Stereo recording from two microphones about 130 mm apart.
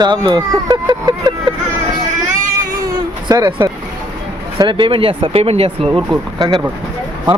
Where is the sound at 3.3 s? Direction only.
35° right (ahead or behind).